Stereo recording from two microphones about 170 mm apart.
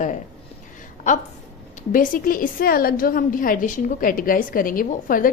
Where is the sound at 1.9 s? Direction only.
55° left (ahead or behind).